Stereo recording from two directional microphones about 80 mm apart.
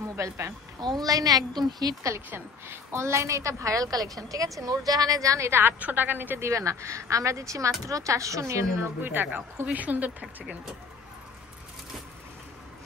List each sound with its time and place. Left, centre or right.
0.1 s speech: right
0.7 s a woman's voice: right
2.1 s a woman's voice: right
5.6 s speech: right
6.5 s speech: right
9.0 s speech: right
10.2 s speech: centre